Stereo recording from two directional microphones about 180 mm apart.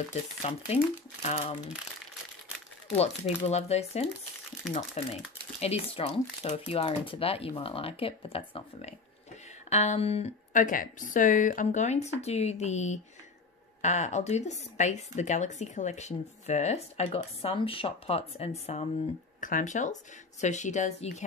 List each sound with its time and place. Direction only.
0.1 s a woman's voice: 35° left (ahead or behind)
3.3 s a woman's voice: 35° left (ahead or behind)